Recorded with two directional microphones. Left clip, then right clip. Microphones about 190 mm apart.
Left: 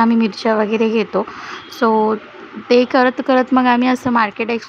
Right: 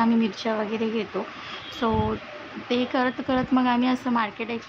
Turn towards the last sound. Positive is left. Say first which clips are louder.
# left 10 dB
turn(degrees=35)  # may be behind; listen again after turning